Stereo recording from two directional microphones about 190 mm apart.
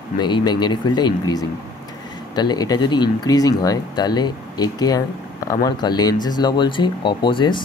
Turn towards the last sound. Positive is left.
turn(degrees=25)  # may be behind; listen again after turning